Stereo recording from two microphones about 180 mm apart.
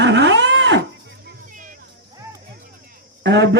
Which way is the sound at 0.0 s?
75° right (ahead or behind).